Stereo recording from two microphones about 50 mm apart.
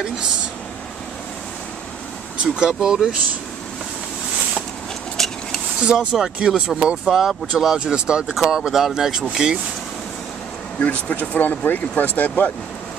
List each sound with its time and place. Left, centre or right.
2.5 s speech: centre
5.1 s vehicle: centre
5.8 s speech: centre
7.8 s speech: centre
10.8 s speech: left